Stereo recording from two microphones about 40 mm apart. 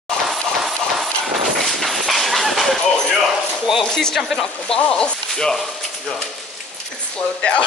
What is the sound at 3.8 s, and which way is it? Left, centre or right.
Speech, centre.